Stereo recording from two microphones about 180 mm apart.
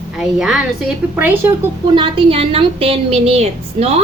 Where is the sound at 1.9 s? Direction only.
30° right (ahead or behind).